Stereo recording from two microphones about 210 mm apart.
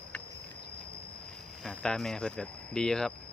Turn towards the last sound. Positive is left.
turn(degrees=0)  # may be behind; listen again after turning